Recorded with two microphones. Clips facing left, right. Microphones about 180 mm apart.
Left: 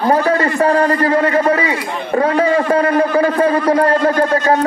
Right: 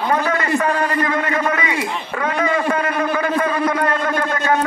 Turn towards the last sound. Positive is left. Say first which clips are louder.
# left 5 dB
turn(degrees=30)  # may be behind; listen again after turning